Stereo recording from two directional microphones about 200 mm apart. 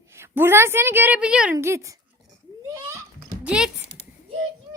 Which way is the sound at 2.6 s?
15° right (ahead or behind).